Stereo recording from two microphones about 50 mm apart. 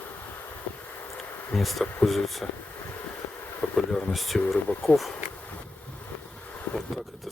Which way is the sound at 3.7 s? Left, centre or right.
Centre.